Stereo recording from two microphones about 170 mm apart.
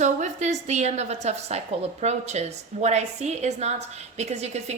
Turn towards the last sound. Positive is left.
turn(degrees=-40)  # may be behind; listen again after turning